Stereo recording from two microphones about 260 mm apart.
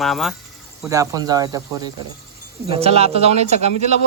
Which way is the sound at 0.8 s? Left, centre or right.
Centre.